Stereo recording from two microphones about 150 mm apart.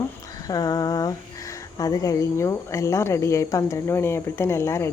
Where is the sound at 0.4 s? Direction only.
25° left (ahead or behind).